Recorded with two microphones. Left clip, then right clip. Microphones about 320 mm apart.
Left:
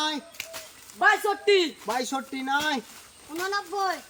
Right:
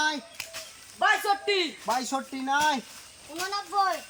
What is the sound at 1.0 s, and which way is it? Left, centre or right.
Speech, centre.